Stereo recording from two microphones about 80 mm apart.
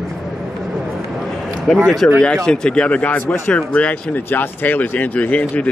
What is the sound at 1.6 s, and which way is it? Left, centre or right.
Speech, centre.